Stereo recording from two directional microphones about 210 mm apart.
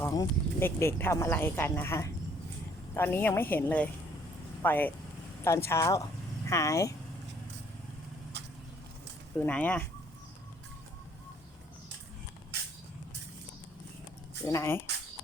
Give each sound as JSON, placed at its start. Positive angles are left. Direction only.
{"t": 0.0, "sound": "speech", "side_deg": 15}
{"t": 9.4, "sound": "speech", "side_deg": 5}
{"t": 14.4, "sound": "speech", "side_deg": 15}